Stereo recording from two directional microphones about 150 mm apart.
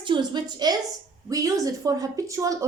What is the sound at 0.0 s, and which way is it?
A woman's voice, 30° right (ahead or behind).